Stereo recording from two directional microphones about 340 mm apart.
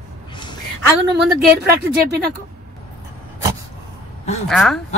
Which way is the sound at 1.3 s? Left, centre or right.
Right.